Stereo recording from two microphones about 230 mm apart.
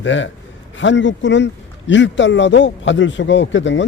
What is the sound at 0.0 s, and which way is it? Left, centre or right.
A man's voice, left.